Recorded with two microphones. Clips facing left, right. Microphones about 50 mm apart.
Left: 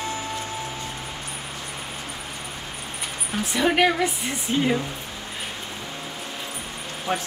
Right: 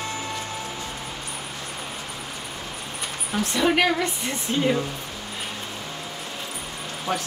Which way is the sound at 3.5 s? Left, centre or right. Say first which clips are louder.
Left 1 dB; centre.